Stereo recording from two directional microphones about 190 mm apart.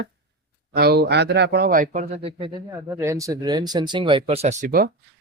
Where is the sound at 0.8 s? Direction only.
55° right (ahead or behind); by 2.7 s 25° right (ahead or behind).